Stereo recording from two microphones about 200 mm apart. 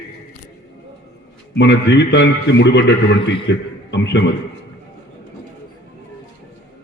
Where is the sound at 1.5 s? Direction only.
60° left (ahead or behind).